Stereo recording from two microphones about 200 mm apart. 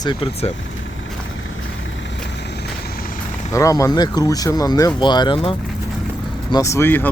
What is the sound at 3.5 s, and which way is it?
Speech, 15° left (ahead or behind).